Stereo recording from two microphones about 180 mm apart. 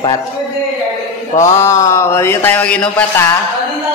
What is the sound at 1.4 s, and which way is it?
Speech, 15° left (ahead or behind).